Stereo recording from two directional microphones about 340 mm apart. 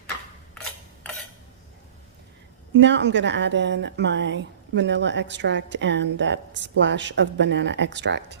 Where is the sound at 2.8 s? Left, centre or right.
Right.